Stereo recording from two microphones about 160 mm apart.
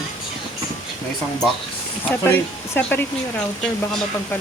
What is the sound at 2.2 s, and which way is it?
Speech, 15° left (ahead or behind).